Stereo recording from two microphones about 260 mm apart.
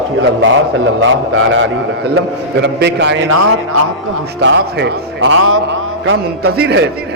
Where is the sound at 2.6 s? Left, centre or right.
Right.